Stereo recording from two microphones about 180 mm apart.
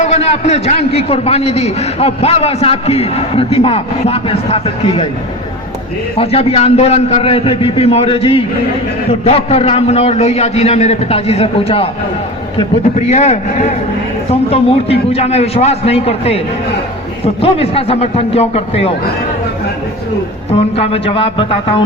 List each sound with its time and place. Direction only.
0.0 s a man's voice: 35° left (ahead or behind)
6.1 s a man's voice: 35° left (ahead or behind)
17.4 s a man's voice: 30° left (ahead or behind)
20.5 s a man's voice: 35° left (ahead or behind)